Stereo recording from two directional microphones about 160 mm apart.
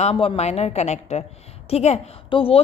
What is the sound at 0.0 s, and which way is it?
A woman's voice, 35° left (ahead or behind).